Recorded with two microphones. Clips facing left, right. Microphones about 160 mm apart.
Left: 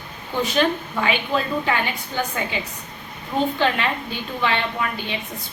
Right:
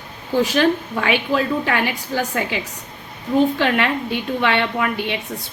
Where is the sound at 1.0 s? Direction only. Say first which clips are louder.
Right 3 dB; 65° right (ahead or behind).